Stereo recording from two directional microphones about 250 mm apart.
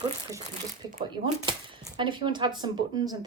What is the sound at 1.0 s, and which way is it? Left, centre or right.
A woman's voice, centre.